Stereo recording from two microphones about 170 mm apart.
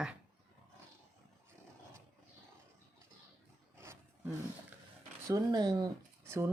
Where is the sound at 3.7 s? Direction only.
15° right (ahead or behind).